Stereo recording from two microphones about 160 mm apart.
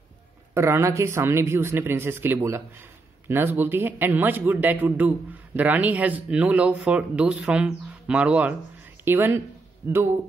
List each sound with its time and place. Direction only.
0.6 s a man's voice: 15° right (ahead or behind)